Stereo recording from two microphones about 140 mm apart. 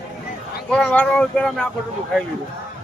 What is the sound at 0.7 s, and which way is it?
Speech, 5° left (ahead or behind).